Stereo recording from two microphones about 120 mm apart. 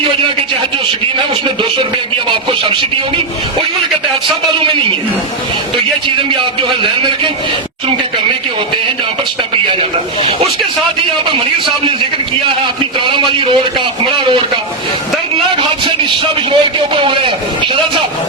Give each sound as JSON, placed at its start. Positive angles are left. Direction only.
{"t": 2.3, "sound": "a man's voice", "side_deg": -45}
{"t": 4.6, "sound": "a man's voice", "side_deg": -45}
{"t": 11.3, "sound": "a man's voice", "side_deg": -45}
{"t": 13.2, "sound": "a man's voice", "side_deg": -45}
{"t": 16.5, "sound": "a man's voice", "side_deg": -45}